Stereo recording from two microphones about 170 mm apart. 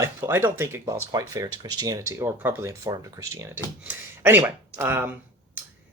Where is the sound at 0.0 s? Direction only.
15° right (ahead or behind).